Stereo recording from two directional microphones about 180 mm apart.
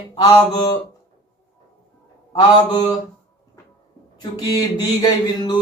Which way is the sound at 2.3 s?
25° left (ahead or behind).